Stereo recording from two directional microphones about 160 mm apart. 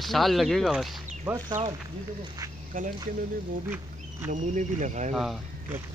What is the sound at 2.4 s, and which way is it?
Duck, 20° right (ahead or behind).